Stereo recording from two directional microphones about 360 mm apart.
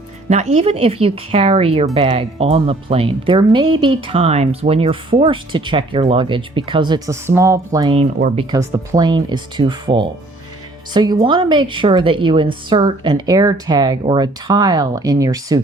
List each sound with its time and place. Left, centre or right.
0.3 s speech: centre